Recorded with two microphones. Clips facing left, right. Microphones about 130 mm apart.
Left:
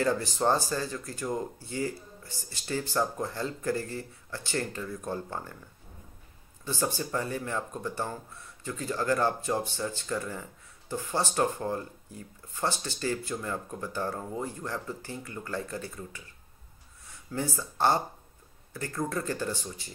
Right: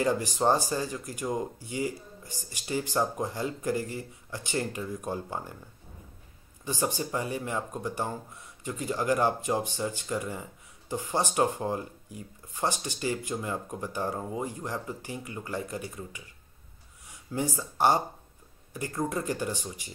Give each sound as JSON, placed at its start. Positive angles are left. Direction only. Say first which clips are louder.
{"t": 0.0, "sound": "speech", "louder": "right 1 dB", "side_deg": -15}
{"t": 6.6, "sound": "speech", "louder": "right 1 dB", "side_deg": -15}
{"t": 17.3, "sound": "speech", "louder": "right 2 dB", "side_deg": -15}